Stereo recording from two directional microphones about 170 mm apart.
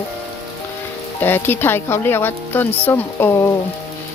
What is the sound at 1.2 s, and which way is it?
A woman's voice, 10° left (ahead or behind).